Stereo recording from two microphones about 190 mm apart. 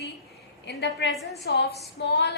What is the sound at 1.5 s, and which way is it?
Speech, 55° left (ahead or behind).